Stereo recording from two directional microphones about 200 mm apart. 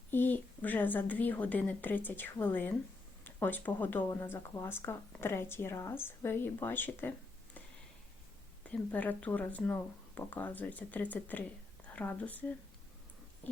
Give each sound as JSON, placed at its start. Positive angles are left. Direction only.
{"t": 0.1, "sound": "speech", "side_deg": 10}
{"t": 8.6, "sound": "speech", "side_deg": 5}
{"t": 13.4, "sound": "a sound", "side_deg": 10}